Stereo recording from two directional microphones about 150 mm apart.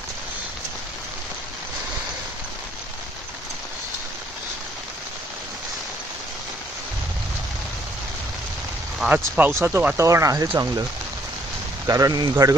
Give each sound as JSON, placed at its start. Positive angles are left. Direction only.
{"t": 9.0, "sound": "speech", "side_deg": -5}